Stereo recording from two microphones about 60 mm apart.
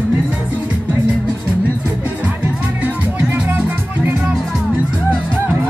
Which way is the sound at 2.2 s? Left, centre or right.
Right.